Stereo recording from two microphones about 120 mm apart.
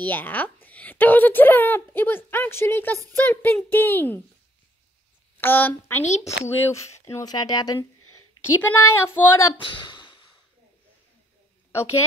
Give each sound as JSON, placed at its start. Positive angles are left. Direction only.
{"t": 0.0, "sound": "speech", "side_deg": 15}
{"t": 5.4, "sound": "speech", "side_deg": 15}
{"t": 8.6, "sound": "speech", "side_deg": 15}
{"t": 9.6, "sound": "speech", "side_deg": 40}